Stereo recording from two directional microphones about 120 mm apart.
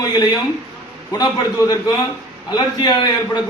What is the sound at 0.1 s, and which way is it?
A man's voice, 35° left (ahead or behind).